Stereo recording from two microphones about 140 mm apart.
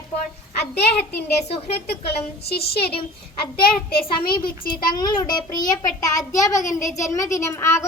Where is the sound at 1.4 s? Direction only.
45° left (ahead or behind).